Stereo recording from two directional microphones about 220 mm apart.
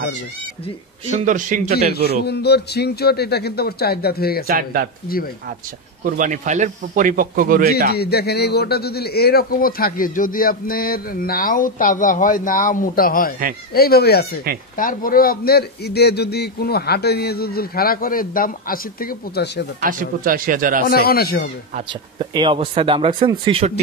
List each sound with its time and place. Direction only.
1.1 s speech: 35° right (ahead or behind)
2.2 s a man's voice: 50° left (ahead or behind)
4.5 s speech: 40° right (ahead or behind)
5.0 s a man's voice: 40° left (ahead or behind)
6.0 s speech: 35° right (ahead or behind)
7.9 s a man's voice: 45° left (ahead or behind)
19.8 s speech: 40° right (ahead or behind)
20.8 s a man's voice: 45° left (ahead or behind)
21.7 s speech: 25° right (ahead or behind)